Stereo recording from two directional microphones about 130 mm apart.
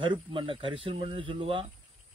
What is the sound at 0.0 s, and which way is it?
Speech, 40° right (ahead or behind).